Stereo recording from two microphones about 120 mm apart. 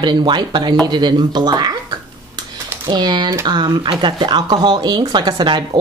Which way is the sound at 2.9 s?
40° right (ahead or behind).